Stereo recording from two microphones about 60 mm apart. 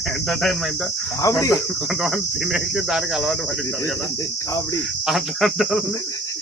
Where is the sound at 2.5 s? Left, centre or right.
Centre.